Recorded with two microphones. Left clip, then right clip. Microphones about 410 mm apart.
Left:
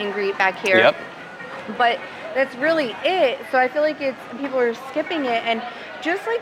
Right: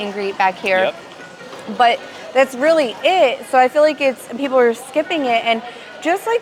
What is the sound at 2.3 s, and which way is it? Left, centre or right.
Speech, right.